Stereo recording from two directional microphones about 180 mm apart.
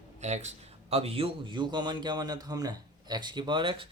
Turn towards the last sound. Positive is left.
turn(degrees=-30)  # may be behind; listen again after turning